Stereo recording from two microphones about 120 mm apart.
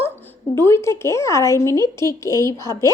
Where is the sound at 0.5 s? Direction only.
20° left (ahead or behind).